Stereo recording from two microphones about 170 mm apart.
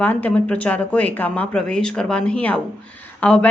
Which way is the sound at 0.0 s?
10° left (ahead or behind).